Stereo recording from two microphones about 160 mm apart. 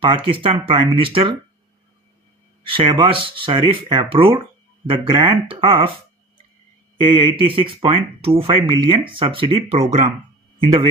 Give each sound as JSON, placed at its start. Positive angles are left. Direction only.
{"t": 0.0, "sound": "speech", "side_deg": -35}
{"t": 2.6, "sound": "speech", "side_deg": -35}
{"t": 7.0, "sound": "speech", "side_deg": -35}
{"t": 10.6, "sound": "speech", "side_deg": -30}